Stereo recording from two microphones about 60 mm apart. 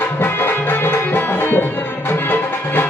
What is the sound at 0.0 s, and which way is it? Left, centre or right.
Music, left.